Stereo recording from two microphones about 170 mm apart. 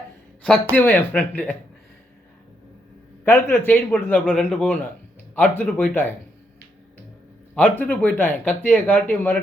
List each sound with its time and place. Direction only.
0.4 s speech: 5° left (ahead or behind)
3.2 s speech: 15° left (ahead or behind)
7.5 s speech: 10° left (ahead or behind)